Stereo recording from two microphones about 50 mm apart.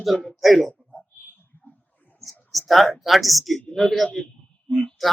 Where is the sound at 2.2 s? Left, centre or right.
Centre.